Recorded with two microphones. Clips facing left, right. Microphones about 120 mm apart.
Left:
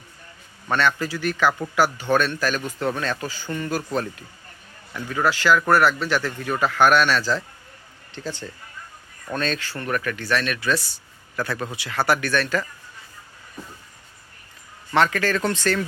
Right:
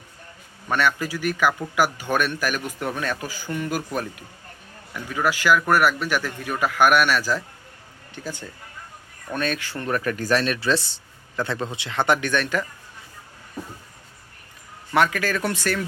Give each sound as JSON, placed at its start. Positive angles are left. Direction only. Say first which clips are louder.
{"t": 0.7, "sound": "a man's voice", "louder": "left 1 dB", "side_deg": -10}
{"t": 14.9, "sound": "a man's voice", "louder": "left 1 dB", "side_deg": -10}